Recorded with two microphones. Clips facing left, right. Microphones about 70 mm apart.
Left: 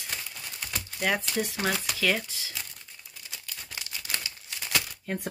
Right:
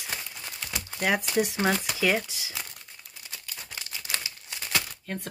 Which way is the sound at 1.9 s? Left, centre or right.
Centre.